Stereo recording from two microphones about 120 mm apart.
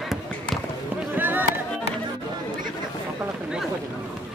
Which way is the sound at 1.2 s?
15° right (ahead or behind).